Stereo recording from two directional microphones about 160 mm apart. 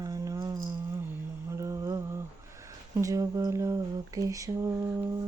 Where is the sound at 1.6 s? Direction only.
20° right (ahead or behind).